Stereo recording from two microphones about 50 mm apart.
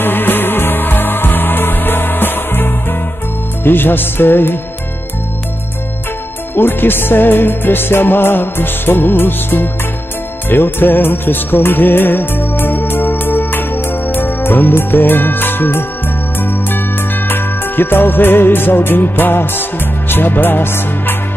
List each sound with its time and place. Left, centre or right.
0.0 s music: left
6.5 s music: left
10.5 s music of bollywood: left
16.3 s music: left
20.1 s speech: left